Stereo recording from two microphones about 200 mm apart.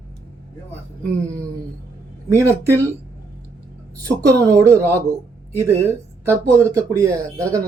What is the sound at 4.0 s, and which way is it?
Speech, 15° right (ahead or behind).